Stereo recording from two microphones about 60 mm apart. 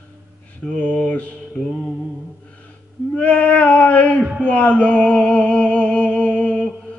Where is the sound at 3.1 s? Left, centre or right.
Left.